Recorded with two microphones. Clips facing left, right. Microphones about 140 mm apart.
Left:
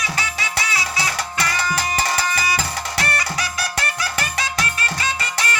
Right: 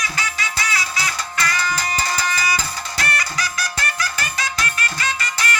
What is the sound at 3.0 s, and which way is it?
Music, 25° left (ahead or behind).